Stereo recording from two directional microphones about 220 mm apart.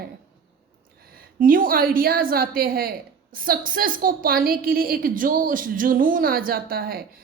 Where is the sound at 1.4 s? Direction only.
40° right (ahead or behind).